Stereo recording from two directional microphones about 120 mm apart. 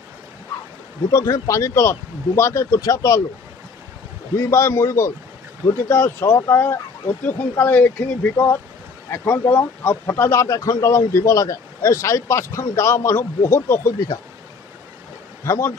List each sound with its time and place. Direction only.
1.1 s speech: 25° left (ahead or behind)
4.4 s speech: 25° left (ahead or behind)
15.4 s a man's voice: 25° left (ahead or behind)